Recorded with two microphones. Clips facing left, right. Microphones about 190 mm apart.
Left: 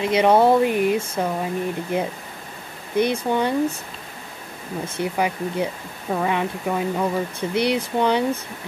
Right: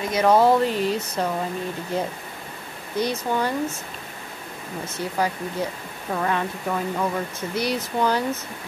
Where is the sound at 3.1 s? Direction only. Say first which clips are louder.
Left 3 dB; 20° left (ahead or behind).